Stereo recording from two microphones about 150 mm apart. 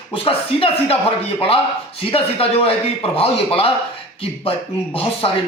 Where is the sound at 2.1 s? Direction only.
40° left (ahead or behind).